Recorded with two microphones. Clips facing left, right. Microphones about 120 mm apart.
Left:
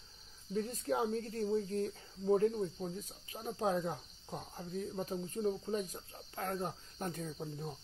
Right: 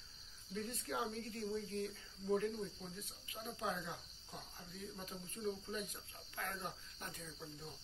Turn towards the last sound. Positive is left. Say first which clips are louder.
# left 9 dB
turn(degrees=45)  # may be behind; listen again after turning